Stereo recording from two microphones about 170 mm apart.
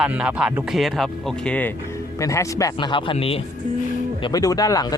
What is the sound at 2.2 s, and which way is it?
Speech, 20° left (ahead or behind).